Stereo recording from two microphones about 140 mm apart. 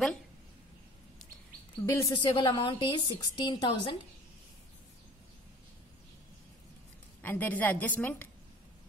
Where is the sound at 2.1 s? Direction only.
35° left (ahead or behind).